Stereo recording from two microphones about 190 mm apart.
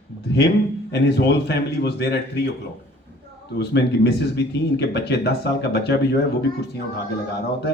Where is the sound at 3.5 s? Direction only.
65° left (ahead or behind).